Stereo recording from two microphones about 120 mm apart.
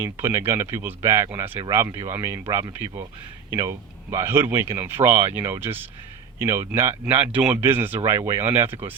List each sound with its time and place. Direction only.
0.0 s speech: 20° right (ahead or behind)